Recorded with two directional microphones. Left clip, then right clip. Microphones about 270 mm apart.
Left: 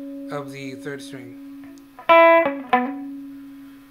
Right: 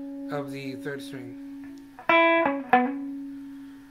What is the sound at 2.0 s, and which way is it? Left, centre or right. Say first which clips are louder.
Music: left 7 dB; left.